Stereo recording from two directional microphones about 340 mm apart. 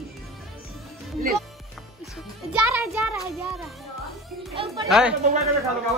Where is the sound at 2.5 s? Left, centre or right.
Centre.